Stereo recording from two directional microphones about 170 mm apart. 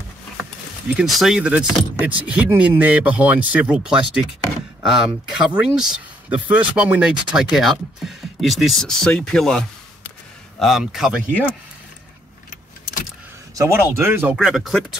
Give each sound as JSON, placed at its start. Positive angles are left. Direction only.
{"t": 0.9, "sound": "speech", "side_deg": 0}
{"t": 12.4, "sound": "vehicle", "side_deg": 50}
{"t": 13.6, "sound": "speech", "side_deg": -15}